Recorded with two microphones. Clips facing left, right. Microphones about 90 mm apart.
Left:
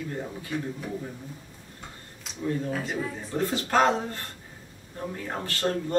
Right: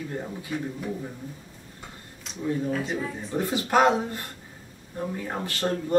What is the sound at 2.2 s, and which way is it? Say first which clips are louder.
Speech: right 2 dB; centre (ahead or behind).